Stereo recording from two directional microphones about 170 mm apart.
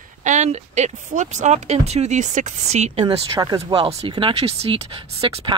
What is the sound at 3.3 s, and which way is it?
Speech, 20° right (ahead or behind).